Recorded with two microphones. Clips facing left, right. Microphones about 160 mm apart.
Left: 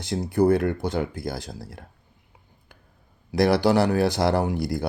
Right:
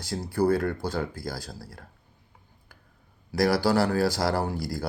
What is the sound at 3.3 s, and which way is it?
Speech, 20° left (ahead or behind).